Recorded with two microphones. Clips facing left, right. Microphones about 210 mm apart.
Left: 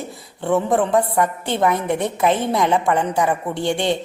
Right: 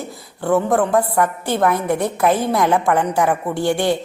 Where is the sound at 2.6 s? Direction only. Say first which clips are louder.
Right 1 dB; 15° left (ahead or behind).